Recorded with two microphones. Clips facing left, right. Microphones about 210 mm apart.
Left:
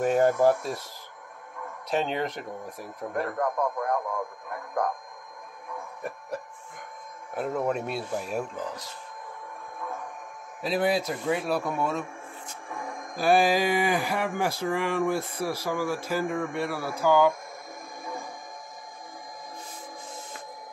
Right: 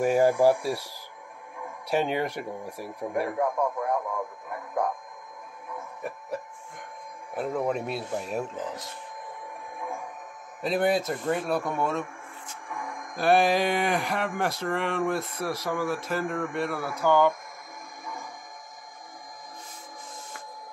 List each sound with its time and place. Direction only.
0.0 s speech: 10° right (ahead or behind)
5.8 s a sound: centre (ahead or behind)
7.3 s speech: centre (ahead or behind)
9.8 s music: 10° right (ahead or behind)
10.6 s speech: centre (ahead or behind)
12.6 s music: 25° left (ahead or behind)
13.2 s speech: centre (ahead or behind)
18.0 s music: 30° left (ahead or behind)